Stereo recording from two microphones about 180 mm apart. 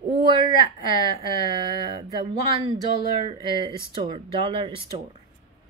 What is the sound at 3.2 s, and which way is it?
A woman's voice, 25° right (ahead or behind).